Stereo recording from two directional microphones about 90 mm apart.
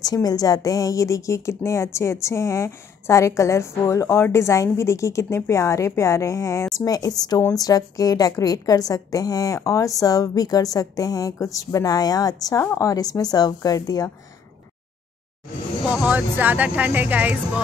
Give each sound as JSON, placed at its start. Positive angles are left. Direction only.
{"t": 0.0, "sound": "a woman's voice", "side_deg": 45}
{"t": 15.9, "sound": "speech", "side_deg": -15}